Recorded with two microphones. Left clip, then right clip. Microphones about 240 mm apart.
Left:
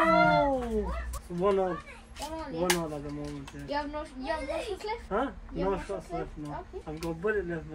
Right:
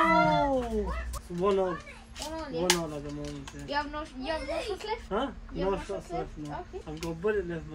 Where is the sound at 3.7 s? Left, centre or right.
Centre.